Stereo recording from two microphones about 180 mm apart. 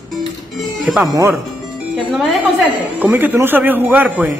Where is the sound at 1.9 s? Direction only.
Centre (ahead or behind).